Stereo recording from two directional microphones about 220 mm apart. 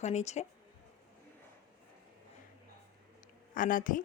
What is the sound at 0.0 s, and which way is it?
Speech, 30° left (ahead or behind).